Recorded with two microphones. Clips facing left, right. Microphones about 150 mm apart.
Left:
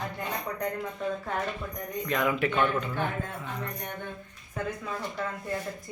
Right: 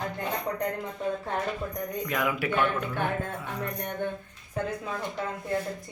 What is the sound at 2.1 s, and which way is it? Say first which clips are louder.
Speech: left 3 dB; 5° right (ahead or behind).